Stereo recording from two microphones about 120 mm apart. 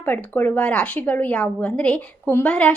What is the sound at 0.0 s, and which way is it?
A woman's voice, 15° left (ahead or behind).